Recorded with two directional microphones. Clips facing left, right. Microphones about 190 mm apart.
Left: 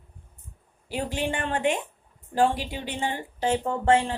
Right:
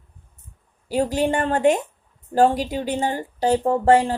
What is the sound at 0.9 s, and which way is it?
A woman's voice, 40° right (ahead or behind).